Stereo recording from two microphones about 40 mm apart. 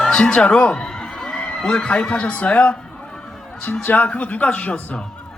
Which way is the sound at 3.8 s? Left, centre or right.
Left.